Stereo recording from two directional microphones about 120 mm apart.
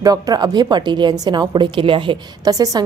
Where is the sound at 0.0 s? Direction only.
30° right (ahead or behind).